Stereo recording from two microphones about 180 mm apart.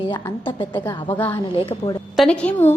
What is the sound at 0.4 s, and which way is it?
A woman's voice, 25° left (ahead or behind).